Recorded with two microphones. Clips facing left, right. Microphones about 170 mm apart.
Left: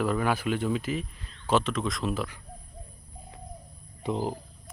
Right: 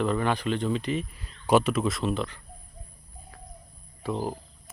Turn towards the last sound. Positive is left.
turn(degrees=15)  # may be behind; listen again after turning